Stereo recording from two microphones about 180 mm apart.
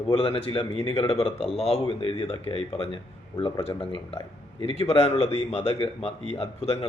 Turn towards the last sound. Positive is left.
turn(degrees=35)  # may be behind; listen again after turning